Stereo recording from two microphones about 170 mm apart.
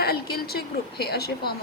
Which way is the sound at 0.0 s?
70° left (ahead or behind).